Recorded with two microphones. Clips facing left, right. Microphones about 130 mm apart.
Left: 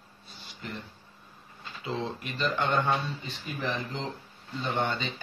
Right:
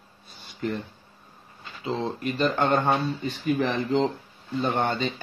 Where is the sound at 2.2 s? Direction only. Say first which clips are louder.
Right 6 dB; 45° right (ahead or behind).